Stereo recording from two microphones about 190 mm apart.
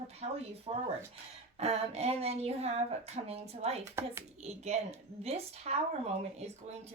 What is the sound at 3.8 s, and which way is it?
Speech, 15° right (ahead or behind).